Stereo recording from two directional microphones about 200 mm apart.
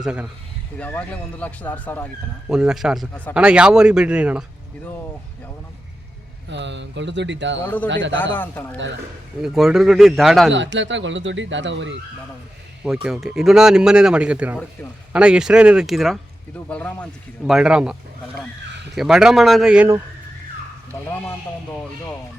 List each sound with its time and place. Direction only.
0.0 s speech: 5° right (ahead or behind)
0.8 s speech: 5° left (ahead or behind)
2.5 s speech: 5° right (ahead or behind)
6.5 s speech: 60° right (ahead or behind)
7.6 s speech: 10° left (ahead or behind)
7.9 s speech: 65° right (ahead or behind)
8.2 s speech: 10° left (ahead or behind)
9.4 s speech: centre (ahead or behind)
10.5 s speech: 65° right (ahead or behind)
12.8 s speech: 5° right (ahead or behind)
18.9 s speech: centre (ahead or behind)